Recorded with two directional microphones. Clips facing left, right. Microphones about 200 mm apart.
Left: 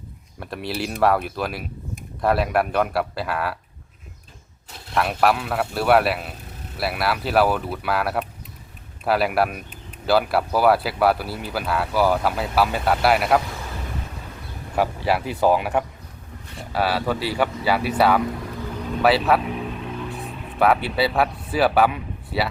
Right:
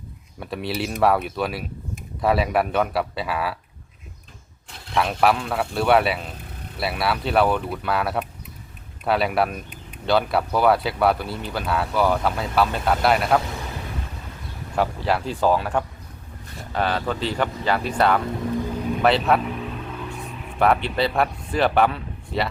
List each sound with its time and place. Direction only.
0.3 s speech: centre (ahead or behind)
4.9 s speech: centre (ahead or behind)
14.8 s speech: 10° left (ahead or behind)
20.1 s a sound: 35° left (ahead or behind)
20.6 s speech: 5° left (ahead or behind)